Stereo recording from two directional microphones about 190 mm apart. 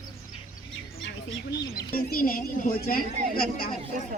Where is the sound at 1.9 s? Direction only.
50° left (ahead or behind).